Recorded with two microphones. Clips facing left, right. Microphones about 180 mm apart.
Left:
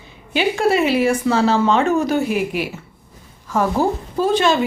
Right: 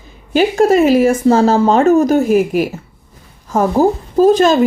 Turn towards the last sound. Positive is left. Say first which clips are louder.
# right 7 dB
turn(degrees=-45)  # may be behind; listen again after turning